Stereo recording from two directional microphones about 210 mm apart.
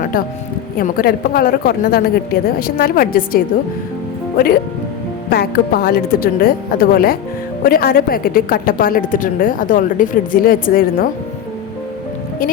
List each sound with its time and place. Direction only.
0.8 s a woman's voice: 45° left (ahead or behind)
5.3 s a woman's voice: 50° left (ahead or behind)